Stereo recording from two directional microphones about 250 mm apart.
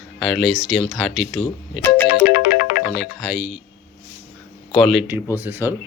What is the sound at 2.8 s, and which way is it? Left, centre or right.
Speech, centre.